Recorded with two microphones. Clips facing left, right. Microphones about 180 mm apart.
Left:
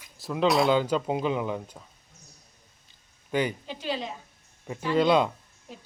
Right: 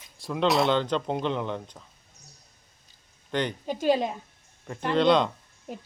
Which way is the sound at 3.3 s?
5° left (ahead or behind).